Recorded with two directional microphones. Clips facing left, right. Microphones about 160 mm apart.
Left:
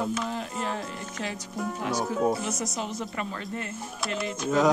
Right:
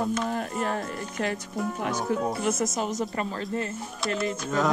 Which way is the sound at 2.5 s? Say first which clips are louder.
Right 5 dB; 50° right (ahead or behind).